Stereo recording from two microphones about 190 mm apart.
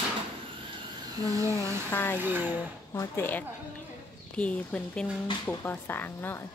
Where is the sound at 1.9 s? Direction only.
10° left (ahead or behind).